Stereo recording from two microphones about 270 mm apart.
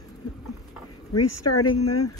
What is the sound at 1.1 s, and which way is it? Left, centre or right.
Speech, left.